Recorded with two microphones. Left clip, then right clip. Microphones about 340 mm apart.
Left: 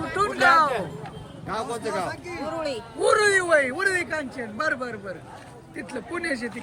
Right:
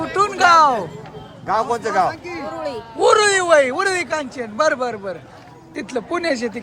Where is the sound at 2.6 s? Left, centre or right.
Centre.